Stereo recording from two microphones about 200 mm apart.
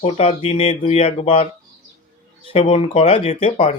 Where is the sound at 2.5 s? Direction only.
30° left (ahead or behind).